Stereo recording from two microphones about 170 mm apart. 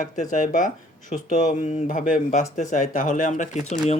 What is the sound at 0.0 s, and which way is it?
Speech, 50° left (ahead or behind).